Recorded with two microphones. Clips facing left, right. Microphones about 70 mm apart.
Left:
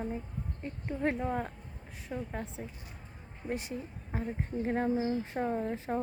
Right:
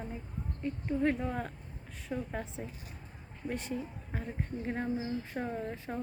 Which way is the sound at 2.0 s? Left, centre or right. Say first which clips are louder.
Right 1 dB; centre.